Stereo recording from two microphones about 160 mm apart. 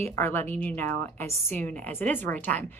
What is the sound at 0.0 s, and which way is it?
A woman's voice, 15° left (ahead or behind).